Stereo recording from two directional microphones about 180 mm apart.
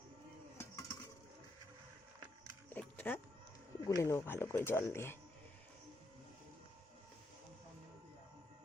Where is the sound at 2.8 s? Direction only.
10° left (ahead or behind).